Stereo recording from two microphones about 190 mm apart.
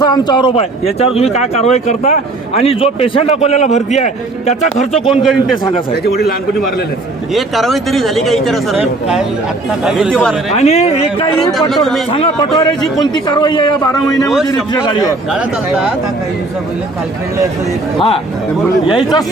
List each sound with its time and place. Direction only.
0.0 s a man's voice: 20° left (ahead or behind); by 4.9 s 40° left (ahead or behind)
5.1 s speech: centre (ahead or behind)
5.9 s a man's voice: 55° left (ahead or behind)
7.3 s speech: centre (ahead or behind)
9.8 s speech: centre (ahead or behind)
10.5 s a man's voice: 35° left (ahead or behind)
11.7 s speech: centre (ahead or behind)
12.1 s a man's voice: 25° left (ahead or behind)
15.3 s speech: 5° right (ahead or behind)
18.9 s a man's voice: 25° left (ahead or behind)